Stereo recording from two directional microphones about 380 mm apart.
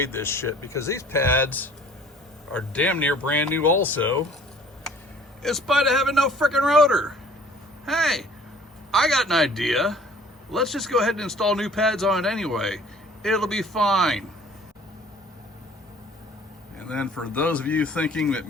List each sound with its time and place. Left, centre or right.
0.0 s speech: centre
5.4 s speech: centre
16.9 s speech: centre